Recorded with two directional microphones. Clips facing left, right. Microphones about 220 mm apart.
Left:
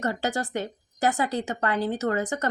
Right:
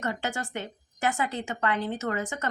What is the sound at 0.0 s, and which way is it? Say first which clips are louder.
Speech: left 4 dB; 35° left (ahead or behind).